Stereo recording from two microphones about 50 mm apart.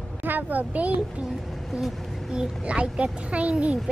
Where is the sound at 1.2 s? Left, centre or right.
Centre.